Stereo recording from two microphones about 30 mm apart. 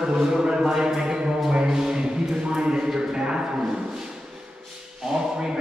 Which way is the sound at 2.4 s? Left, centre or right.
Right.